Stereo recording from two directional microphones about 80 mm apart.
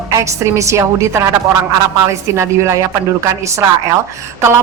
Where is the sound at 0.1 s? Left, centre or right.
Right.